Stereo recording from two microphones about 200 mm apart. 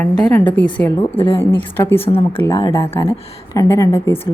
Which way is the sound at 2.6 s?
15° left (ahead or behind).